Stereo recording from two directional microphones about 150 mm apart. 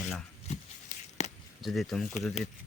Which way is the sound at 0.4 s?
50° left (ahead or behind).